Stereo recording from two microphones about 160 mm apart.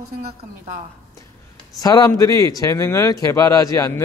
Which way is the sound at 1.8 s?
20° left (ahead or behind).